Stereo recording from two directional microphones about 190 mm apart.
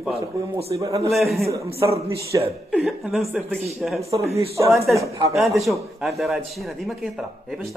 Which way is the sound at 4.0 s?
35° right (ahead or behind).